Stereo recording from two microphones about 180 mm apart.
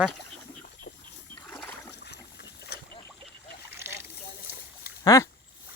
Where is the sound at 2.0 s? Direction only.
65° left (ahead or behind).